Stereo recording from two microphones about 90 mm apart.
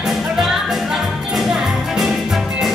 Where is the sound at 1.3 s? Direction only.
5° right (ahead or behind).